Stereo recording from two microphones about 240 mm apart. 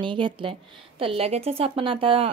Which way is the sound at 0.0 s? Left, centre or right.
Centre.